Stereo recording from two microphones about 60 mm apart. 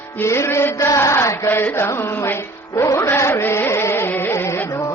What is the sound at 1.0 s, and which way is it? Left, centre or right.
Chant, left.